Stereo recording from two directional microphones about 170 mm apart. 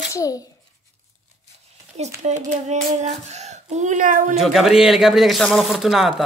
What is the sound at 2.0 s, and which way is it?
A child's voice, 40° right (ahead or behind).